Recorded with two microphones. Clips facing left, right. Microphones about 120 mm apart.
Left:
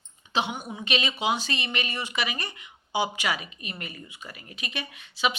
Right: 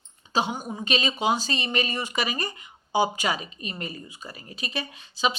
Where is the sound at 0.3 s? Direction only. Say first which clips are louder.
Right 2 dB; 40° right (ahead or behind).